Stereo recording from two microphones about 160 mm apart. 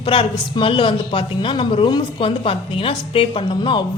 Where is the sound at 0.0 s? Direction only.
35° left (ahead or behind).